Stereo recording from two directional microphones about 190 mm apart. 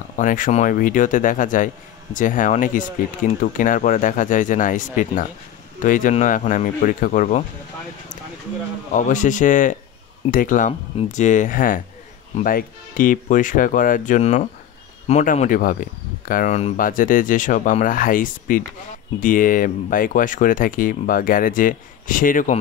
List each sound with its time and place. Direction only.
0.2 s speech: 45° left (ahead or behind)
8.9 s speech: 40° left (ahead or behind)